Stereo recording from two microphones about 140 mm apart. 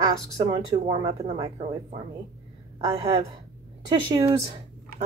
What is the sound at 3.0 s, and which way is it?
Speech, 45° right (ahead or behind).